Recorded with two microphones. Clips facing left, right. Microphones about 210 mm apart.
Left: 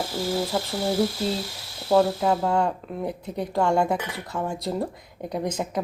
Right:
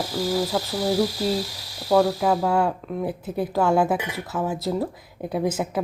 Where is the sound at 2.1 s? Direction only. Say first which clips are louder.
Right 1 dB; centre (ahead or behind).